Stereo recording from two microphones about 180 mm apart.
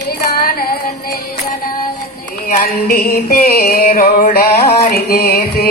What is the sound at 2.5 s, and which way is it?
Music, 55° left (ahead or behind).